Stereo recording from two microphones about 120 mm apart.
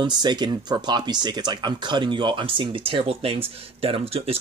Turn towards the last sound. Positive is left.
turn(degrees=-55)  # may be behind; listen again after turning